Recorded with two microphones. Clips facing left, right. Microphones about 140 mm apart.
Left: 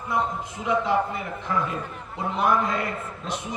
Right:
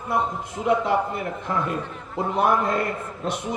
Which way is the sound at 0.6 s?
55° right (ahead or behind).